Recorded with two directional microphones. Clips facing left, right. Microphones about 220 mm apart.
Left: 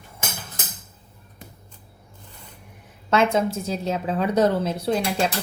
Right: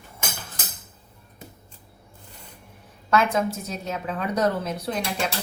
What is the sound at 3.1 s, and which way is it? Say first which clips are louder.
A woman's voice: left 2 dB; 25° left (ahead or behind).